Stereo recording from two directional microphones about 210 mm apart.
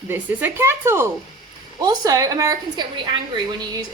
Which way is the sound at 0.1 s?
10° right (ahead or behind).